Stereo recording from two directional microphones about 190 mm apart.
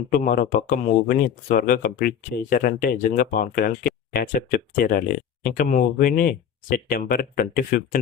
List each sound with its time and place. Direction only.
0.1 s speech: 45° left (ahead or behind)